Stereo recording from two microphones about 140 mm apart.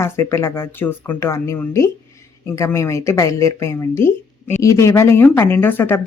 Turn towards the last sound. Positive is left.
turn(degrees=15)  # may be behind; listen again after turning